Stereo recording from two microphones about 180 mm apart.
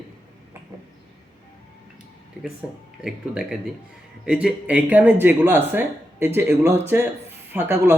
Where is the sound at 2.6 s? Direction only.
5° right (ahead or behind).